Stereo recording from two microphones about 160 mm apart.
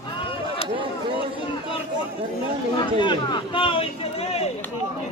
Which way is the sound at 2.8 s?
30° left (ahead or behind).